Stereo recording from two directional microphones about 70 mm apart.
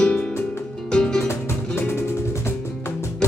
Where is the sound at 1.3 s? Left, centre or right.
Left.